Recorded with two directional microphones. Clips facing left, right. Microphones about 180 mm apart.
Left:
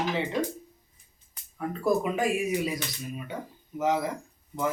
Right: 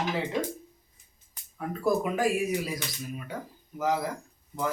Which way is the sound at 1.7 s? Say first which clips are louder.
Left 1 dB; 5° right (ahead or behind).